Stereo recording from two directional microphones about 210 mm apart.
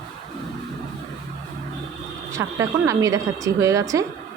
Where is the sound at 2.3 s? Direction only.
15° right (ahead or behind).